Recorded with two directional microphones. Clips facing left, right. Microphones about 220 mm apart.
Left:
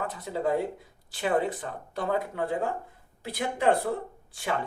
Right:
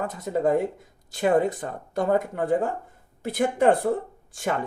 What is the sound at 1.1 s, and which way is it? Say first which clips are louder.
Speech: right 5 dB; 45° right (ahead or behind).